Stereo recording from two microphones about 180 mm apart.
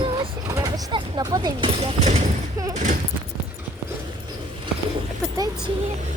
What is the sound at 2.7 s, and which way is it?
Speech, 45° right (ahead or behind).